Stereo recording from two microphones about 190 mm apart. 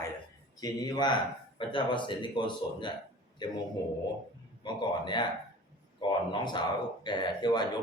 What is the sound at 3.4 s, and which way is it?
Speech, 25° left (ahead or behind).